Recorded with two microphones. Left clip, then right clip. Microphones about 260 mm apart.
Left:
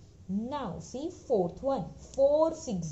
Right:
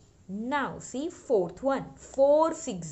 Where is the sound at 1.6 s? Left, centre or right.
Right.